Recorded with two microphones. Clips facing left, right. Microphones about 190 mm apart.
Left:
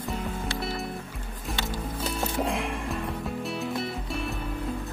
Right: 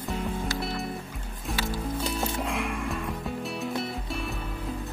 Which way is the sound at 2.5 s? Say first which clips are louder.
Left 1 dB; 35° left (ahead or behind).